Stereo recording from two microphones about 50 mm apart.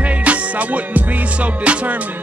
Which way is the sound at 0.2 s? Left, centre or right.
Right.